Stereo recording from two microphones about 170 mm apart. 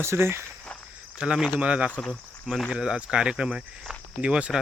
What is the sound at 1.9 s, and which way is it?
Speech, 5° left (ahead or behind).